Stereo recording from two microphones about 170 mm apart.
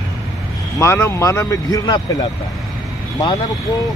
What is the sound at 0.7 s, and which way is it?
Speech, 15° left (ahead or behind).